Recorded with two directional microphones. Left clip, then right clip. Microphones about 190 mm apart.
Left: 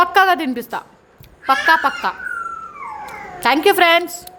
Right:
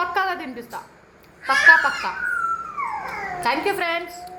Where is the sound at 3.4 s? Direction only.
65° left (ahead or behind).